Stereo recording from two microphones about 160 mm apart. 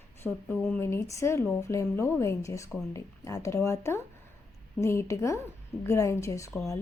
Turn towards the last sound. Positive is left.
turn(degrees=20)  # may be behind; listen again after turning